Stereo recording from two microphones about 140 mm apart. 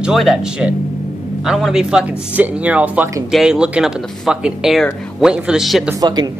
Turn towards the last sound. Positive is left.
turn(degrees=-30)  # may be behind; listen again after turning